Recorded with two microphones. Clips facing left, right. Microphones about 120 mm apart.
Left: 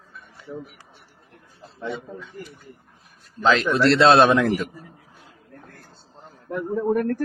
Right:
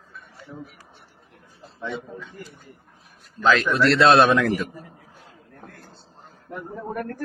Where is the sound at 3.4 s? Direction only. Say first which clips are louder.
Even; 25° left (ahead or behind).